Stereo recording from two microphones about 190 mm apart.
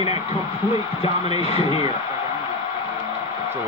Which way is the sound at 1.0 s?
30° left (ahead or behind).